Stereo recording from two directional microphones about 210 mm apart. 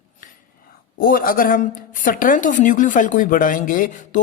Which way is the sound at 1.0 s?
45° left (ahead or behind).